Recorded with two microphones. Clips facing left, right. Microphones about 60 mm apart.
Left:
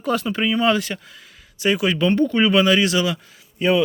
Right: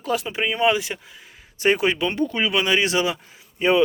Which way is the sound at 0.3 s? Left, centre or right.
Centre.